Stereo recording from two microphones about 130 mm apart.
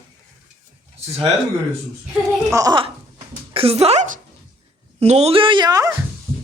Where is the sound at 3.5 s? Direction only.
50° right (ahead or behind); by 5.9 s 25° right (ahead or behind).